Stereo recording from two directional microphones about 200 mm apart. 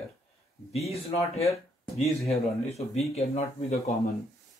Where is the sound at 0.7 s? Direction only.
30° left (ahead or behind).